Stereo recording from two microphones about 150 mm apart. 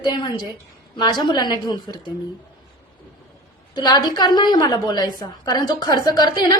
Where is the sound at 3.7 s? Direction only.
30° left (ahead or behind).